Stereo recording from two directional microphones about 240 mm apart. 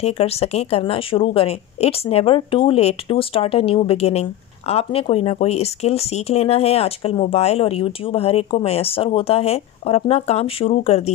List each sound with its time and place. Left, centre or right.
0.0 s a woman's voice: left